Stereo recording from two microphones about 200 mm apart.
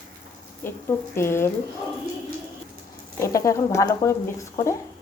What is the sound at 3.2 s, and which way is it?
Speech, 15° left (ahead or behind).